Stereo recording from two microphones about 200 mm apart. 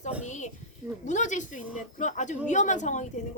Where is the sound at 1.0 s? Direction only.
35° left (ahead or behind).